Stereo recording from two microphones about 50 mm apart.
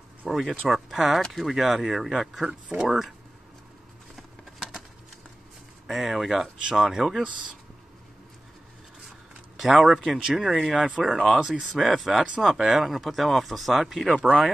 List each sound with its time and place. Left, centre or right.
0.2 s speech: centre
2.4 s speech: centre
5.9 s speech: centre
7.2 s speech: right
9.7 s speech: centre
11.4 s speech: centre
11.8 s speech: centre
14.1 s speech: right